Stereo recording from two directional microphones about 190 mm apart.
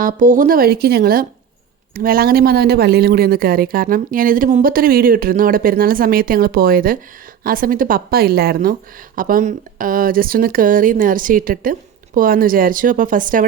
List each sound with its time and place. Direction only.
0.0 s a woman's voice: 45° right (ahead or behind)